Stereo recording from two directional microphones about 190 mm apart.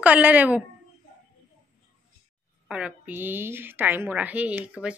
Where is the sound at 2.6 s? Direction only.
5° right (ahead or behind).